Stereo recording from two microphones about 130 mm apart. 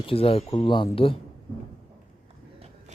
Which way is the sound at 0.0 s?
45° left (ahead or behind).